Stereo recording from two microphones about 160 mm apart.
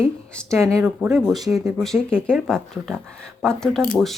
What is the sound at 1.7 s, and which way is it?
Speech, 5° left (ahead or behind).